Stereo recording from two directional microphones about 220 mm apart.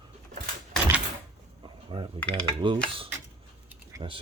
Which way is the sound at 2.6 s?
20° right (ahead or behind).